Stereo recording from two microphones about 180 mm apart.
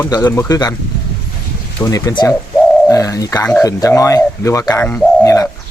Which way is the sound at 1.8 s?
20° left (ahead or behind).